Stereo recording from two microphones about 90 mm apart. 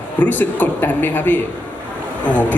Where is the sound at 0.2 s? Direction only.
20° left (ahead or behind).